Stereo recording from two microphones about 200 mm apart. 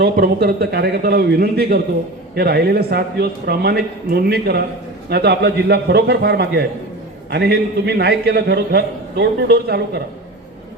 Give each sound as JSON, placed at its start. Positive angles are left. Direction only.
{"t": 0.0, "sound": "a man's voice", "side_deg": -55}